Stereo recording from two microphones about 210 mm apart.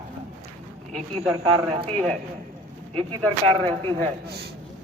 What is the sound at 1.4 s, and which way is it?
Speech, 30° right (ahead or behind).